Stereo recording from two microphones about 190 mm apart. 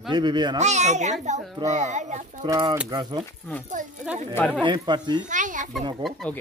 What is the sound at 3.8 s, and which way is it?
Speech, 45° right (ahead or behind).